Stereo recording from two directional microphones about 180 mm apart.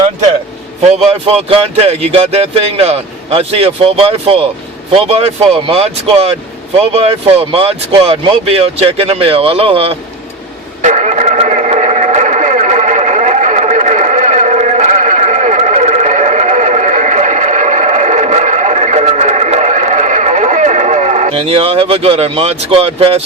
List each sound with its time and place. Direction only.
0.9 s speech: 35° right (ahead or behind)
10.8 s music: 40° right (ahead or behind)